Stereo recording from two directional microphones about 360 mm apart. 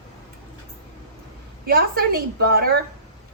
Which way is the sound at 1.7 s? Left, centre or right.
Right.